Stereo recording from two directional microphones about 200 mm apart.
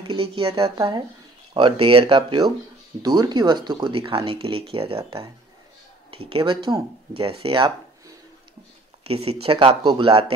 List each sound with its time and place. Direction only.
0.1 s speech: 25° right (ahead or behind)
9.0 s speech: 30° right (ahead or behind)